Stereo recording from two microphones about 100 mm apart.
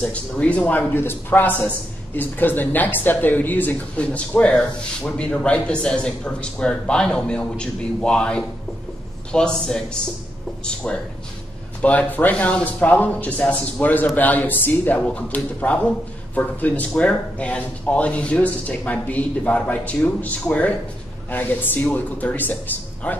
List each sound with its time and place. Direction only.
0.0 s speech: 10° left (ahead or behind)